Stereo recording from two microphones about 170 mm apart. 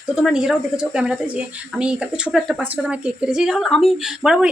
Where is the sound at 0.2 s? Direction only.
Centre (ahead or behind).